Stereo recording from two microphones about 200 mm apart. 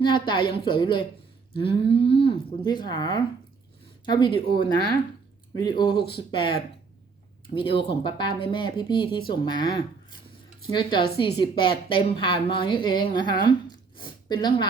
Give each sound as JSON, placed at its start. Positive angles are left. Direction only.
{"t": 0.0, "sound": "a woman's voice", "side_deg": 25}
{"t": 5.5, "sound": "a woman's voice", "side_deg": 20}